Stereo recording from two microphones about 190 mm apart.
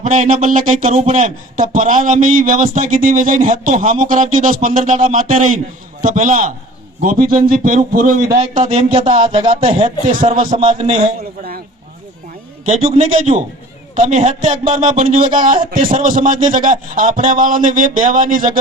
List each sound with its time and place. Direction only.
0.0 s speech: 40° right (ahead or behind)
8.4 s speech: 35° right (ahead or behind)
9.5 s speech: 35° right (ahead or behind)
10.1 s speech: 45° right (ahead or behind)
10.5 s speech: 30° right (ahead or behind)
12.6 s speech: 35° right (ahead or behind)